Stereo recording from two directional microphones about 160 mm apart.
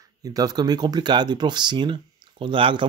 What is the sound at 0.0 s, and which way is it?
Speech, 20° right (ahead or behind).